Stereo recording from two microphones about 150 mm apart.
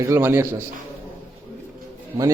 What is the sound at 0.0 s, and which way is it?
Speech, 15° right (ahead or behind).